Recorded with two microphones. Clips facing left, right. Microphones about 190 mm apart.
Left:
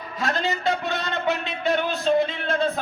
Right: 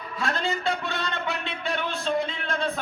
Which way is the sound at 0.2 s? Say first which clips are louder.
Left 2 dB; 20° left (ahead or behind).